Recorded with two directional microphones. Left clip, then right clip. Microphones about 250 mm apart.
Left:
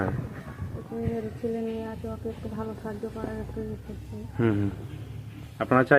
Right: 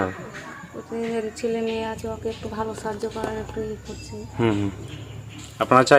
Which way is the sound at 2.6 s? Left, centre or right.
Right.